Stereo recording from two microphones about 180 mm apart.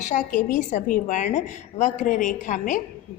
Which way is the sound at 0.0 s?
40° left (ahead or behind).